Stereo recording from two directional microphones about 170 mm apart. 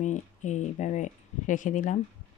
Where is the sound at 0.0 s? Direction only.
45° left (ahead or behind).